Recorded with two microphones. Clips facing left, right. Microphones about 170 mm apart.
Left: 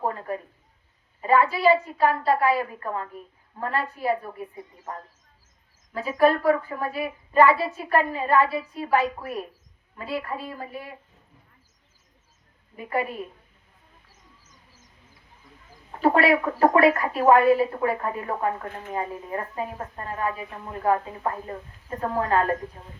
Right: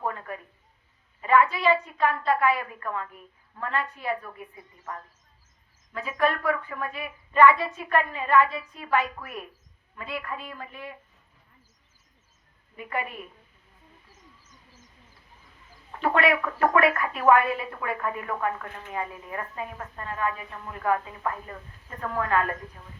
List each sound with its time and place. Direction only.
0.0 s a sound: 30° left (ahead or behind)
1.2 s a child's voice: 35° left (ahead or behind)
12.7 s a woman's voice: 35° left (ahead or behind)
15.9 s a woman's voice: 35° left (ahead or behind)